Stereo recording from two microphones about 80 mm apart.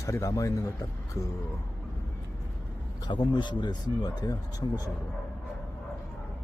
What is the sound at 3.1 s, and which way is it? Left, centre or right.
Speech, left.